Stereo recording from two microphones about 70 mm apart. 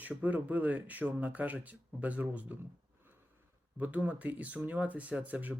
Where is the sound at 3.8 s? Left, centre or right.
Right.